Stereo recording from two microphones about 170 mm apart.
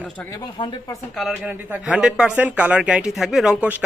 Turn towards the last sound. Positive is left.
turn(degrees=-5)  # may be behind; listen again after turning